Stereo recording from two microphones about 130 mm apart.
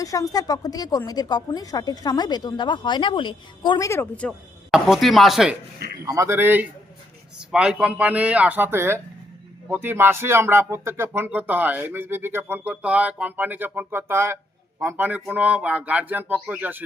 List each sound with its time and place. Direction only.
0.0 s a woman's voice: 25° left (ahead or behind)
3.8 s speech: 20° left (ahead or behind)
4.7 s speech: centre (ahead or behind)
6.1 s speech: 20° right (ahead or behind)